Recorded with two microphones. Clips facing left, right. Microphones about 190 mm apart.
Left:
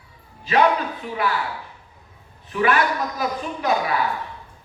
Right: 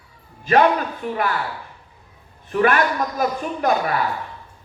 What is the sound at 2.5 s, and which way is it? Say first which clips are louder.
A man's voice: right 2 dB; 50° right (ahead or behind).